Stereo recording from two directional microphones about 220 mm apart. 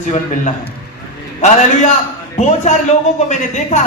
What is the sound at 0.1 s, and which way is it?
Speech, 35° left (ahead or behind).